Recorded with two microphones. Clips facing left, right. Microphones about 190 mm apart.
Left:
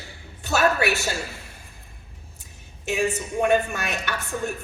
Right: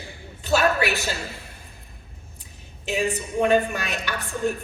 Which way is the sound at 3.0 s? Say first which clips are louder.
Even; 45° left (ahead or behind).